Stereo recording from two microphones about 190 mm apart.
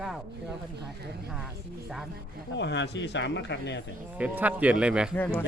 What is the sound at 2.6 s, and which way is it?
Speech, 65° left (ahead or behind).